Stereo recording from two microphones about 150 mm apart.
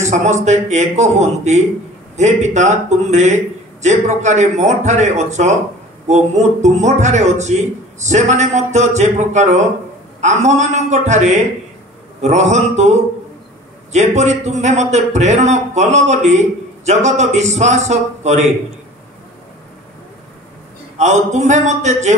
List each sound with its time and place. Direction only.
0.0 s a man's voice: 50° right (ahead or behind)
21.0 s a man's voice: 50° right (ahead or behind)